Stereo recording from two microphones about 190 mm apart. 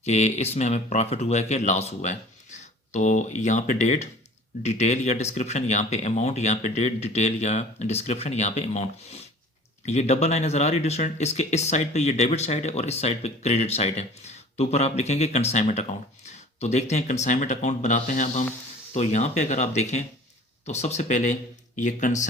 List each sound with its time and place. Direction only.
0.0 s speech: 35° left (ahead or behind)